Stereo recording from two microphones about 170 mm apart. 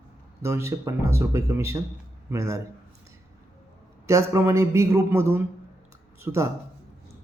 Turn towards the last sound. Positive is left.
turn(degrees=-15)  # may be behind; listen again after turning